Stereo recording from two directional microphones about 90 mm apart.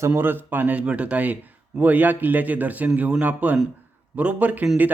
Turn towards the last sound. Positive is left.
turn(degrees=-15)  # may be behind; listen again after turning